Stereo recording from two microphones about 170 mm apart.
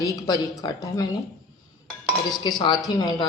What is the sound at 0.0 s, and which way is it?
Speech, 20° left (ahead or behind).